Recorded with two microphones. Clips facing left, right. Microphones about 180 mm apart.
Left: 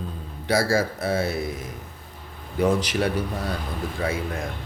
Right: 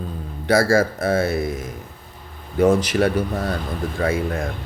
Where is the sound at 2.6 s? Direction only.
50° right (ahead or behind).